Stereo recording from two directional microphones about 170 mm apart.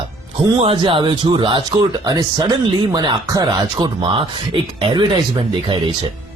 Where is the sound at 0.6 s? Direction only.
30° right (ahead or behind).